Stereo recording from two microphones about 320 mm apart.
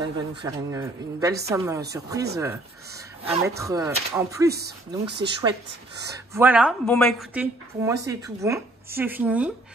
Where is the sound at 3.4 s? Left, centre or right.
Centre.